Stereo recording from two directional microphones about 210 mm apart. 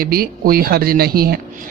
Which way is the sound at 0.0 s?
45° right (ahead or behind).